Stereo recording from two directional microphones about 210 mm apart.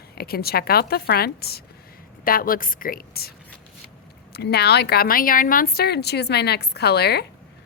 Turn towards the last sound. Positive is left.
turn(degrees=50)  # may be behind; listen again after turning